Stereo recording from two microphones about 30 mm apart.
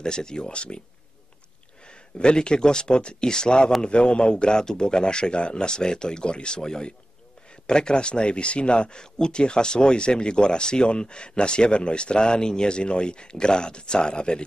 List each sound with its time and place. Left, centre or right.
0.0 s a man's voice: left
2.1 s a man's voice: left